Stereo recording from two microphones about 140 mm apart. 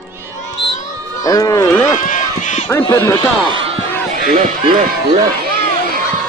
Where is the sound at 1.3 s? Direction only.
25° left (ahead or behind).